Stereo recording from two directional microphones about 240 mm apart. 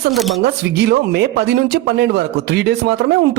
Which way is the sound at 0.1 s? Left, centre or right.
Centre.